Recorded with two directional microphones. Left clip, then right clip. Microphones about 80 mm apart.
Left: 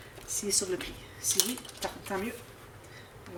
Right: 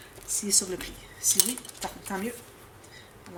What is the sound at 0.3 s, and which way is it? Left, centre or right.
Speech, right.